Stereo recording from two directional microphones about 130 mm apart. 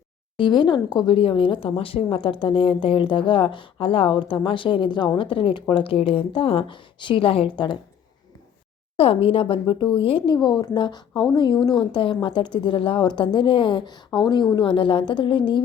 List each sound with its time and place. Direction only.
0.3 s a woman's voice: 35° left (ahead or behind)
9.0 s speech: 45° left (ahead or behind)
10.3 s a woman's voice: 35° left (ahead or behind)